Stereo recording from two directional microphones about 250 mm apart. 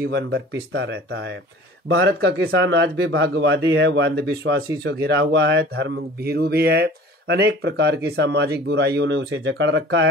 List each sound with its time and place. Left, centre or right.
0.0 s speech: right